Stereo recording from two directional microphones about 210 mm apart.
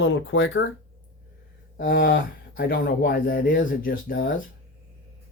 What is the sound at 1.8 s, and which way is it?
Speech, 45° left (ahead or behind).